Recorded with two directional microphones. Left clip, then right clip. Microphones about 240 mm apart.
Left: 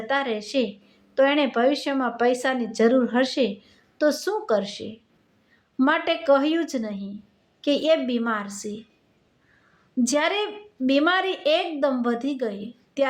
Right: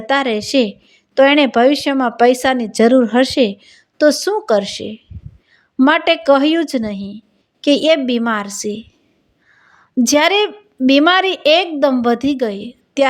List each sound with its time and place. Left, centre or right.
0.1 s a woman's voice: right
10.0 s a woman's voice: right